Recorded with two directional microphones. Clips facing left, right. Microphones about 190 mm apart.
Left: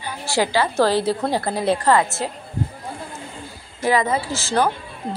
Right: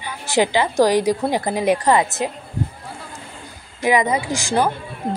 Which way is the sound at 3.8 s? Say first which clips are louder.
Right 1 dB; 15° right (ahead or behind).